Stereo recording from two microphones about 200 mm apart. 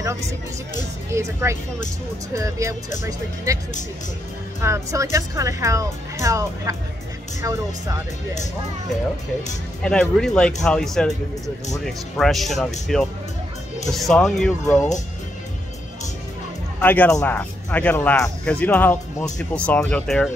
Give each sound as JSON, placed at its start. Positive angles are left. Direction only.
{"t": 1.1, "sound": "speech", "side_deg": -15}
{"t": 9.8, "sound": "speech", "side_deg": 5}
{"t": 16.8, "sound": "speech", "side_deg": 10}